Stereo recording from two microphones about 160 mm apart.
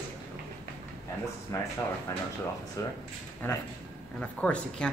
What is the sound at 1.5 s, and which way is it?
Speech, 20° left (ahead or behind).